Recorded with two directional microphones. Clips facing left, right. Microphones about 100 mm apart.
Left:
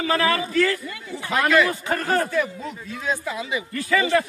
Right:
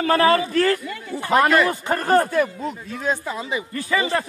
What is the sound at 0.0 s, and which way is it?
A man's voice, 55° right (ahead or behind).